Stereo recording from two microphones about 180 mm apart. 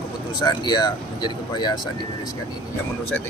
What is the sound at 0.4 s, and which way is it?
Speech, 25° left (ahead or behind).